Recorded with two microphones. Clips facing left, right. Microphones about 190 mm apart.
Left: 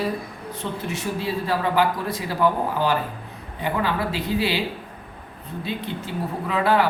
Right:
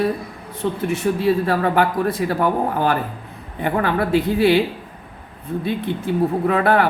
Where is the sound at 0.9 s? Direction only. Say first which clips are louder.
Right 9 dB; 55° right (ahead or behind).